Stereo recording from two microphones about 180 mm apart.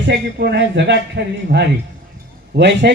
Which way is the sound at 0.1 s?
65° right (ahead or behind).